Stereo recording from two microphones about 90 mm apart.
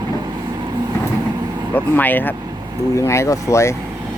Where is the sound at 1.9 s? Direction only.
20° left (ahead or behind).